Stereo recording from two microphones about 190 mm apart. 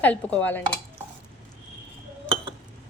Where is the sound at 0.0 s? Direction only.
10° left (ahead or behind).